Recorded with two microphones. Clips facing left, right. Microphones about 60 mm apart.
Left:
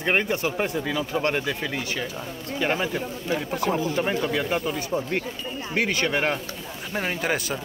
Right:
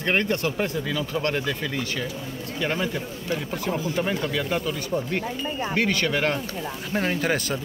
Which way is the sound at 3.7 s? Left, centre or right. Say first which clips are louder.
Left 1 dB; left.